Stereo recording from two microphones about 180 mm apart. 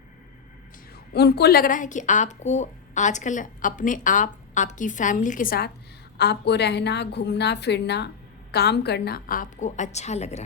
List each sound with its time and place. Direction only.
1.1 s speech: 65° left (ahead or behind)
6.1 s a woman's voice: 70° left (ahead or behind); by 10.4 s 40° left (ahead or behind)